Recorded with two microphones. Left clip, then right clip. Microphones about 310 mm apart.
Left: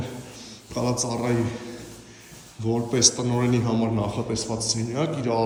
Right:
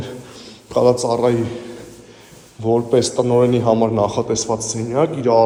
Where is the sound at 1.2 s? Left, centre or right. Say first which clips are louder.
Right 9 dB; centre.